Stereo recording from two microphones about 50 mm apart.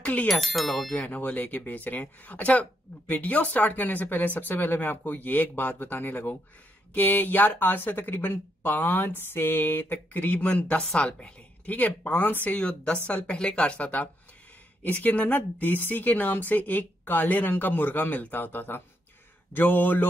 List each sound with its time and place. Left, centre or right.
0.0 s speech: left
0.6 s speech: centre
1.0 s speech: left
10.4 s speech: left